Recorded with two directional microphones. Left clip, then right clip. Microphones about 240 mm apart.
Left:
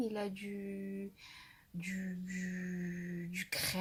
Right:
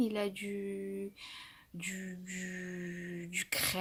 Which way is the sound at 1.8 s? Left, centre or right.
Right.